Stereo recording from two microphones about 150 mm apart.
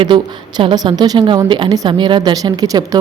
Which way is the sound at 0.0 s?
35° right (ahead or behind).